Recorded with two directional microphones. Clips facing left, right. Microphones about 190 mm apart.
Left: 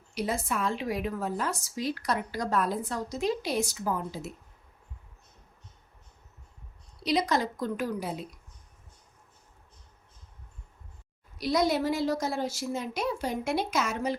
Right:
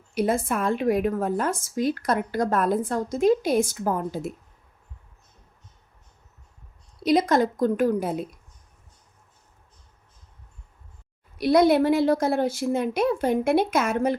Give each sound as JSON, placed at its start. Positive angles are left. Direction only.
{"t": 0.1, "sound": "a woman's voice", "side_deg": -50}
{"t": 7.0, "sound": "a woman's voice", "side_deg": -50}
{"t": 11.3, "sound": "a woman's voice", "side_deg": -60}